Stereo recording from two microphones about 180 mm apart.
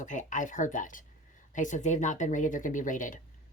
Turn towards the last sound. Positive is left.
turn(degrees=45)  # may be behind; listen again after turning